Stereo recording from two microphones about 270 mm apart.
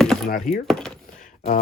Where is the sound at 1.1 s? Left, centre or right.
Left.